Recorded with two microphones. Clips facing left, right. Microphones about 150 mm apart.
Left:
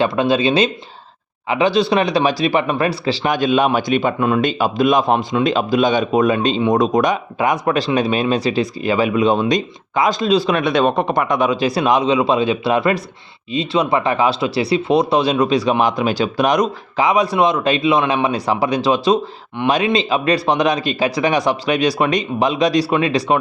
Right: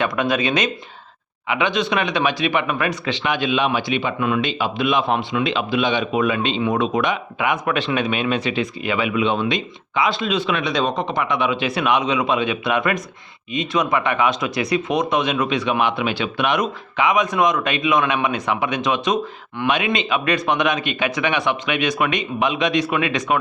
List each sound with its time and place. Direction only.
0.0 s speech: 30° left (ahead or behind)
10.6 s speech: 55° left (ahead or behind); by 23.4 s 35° left (ahead or behind)